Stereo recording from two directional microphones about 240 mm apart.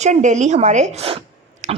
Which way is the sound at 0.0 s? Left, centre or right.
Right.